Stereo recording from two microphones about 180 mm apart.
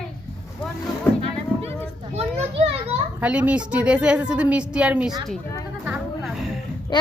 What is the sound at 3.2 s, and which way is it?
A woman's voice, 5° right (ahead or behind).